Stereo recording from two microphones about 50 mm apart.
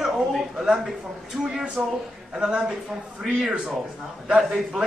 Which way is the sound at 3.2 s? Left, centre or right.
Centre.